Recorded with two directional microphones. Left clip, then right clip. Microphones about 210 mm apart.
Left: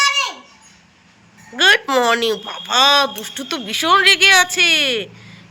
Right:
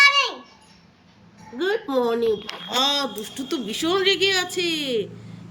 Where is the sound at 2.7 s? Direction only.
5° right (ahead or behind).